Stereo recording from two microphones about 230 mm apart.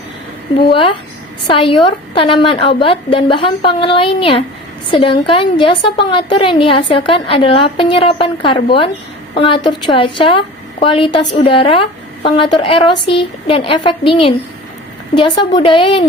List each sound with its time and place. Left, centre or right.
0.5 s a woman's voice: left
15.5 s a woman's voice: left